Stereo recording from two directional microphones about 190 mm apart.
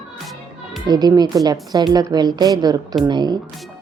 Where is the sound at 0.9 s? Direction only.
20° right (ahead or behind).